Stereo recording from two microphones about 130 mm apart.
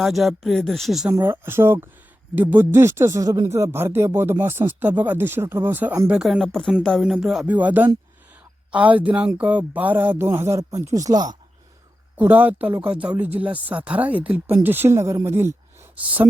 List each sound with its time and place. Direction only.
0.0 s speech: centre (ahead or behind)
1.1 s speech: 20° right (ahead or behind)
6.1 s speech: 5° right (ahead or behind); by 11.3 s 30° right (ahead or behind)
12.1 s speech: 15° right (ahead or behind)